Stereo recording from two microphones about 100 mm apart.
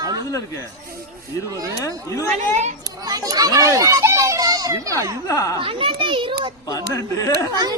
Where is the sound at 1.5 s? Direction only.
35° right (ahead or behind).